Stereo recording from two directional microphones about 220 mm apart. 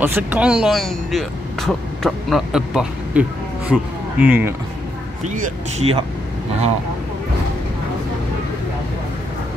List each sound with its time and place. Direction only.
0.0 s speech: 5° right (ahead or behind)
5.2 s speech: 30° right (ahead or behind)